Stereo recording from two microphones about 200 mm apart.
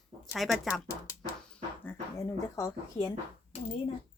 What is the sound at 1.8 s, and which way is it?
Speech, 15° left (ahead or behind).